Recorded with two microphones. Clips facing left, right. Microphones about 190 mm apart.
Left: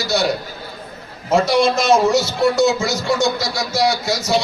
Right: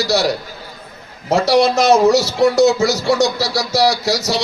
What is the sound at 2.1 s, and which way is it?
A man's voice, 70° right (ahead or behind).